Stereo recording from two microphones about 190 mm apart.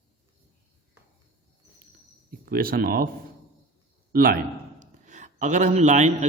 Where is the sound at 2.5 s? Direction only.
50° right (ahead or behind).